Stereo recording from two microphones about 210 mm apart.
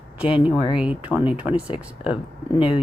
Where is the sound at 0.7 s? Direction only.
5° right (ahead or behind).